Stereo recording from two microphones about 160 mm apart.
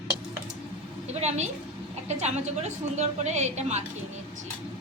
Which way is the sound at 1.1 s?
45° right (ahead or behind).